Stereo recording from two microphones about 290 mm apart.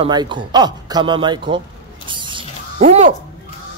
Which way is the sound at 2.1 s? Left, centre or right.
Centre.